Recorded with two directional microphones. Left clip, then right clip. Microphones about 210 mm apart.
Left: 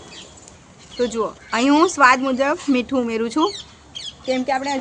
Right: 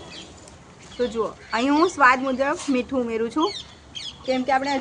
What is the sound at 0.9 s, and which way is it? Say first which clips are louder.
Speech: left 3 dB; 45° left (ahead or behind).